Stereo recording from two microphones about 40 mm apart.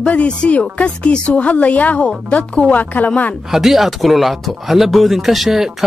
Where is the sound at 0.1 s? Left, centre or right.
Left.